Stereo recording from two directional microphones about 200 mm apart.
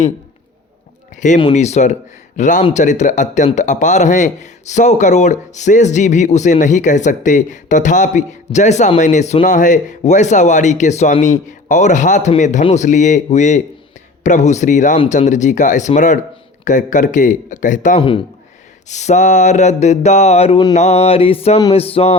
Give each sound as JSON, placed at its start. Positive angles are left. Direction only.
{"t": 1.1, "sound": "a man's voice", "side_deg": 40}